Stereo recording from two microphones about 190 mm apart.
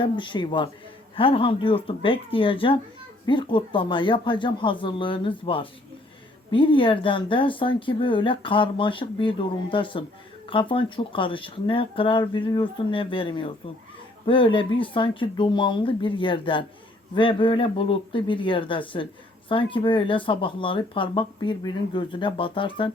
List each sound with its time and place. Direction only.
0.0 s speech: 25° left (ahead or behind)
6.5 s speech: 25° left (ahead or behind)